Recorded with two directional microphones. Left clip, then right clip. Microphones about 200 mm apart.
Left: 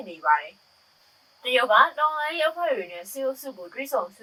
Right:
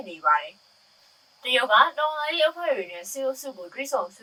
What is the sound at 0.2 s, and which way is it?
Speech, 20° right (ahead or behind).